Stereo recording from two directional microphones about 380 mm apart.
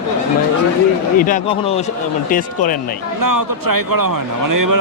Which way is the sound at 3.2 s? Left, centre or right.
Right.